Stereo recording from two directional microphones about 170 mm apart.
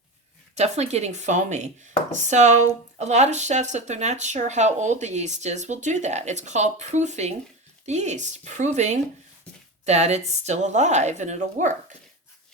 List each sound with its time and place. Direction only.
0.5 s speech: 40° right (ahead or behind)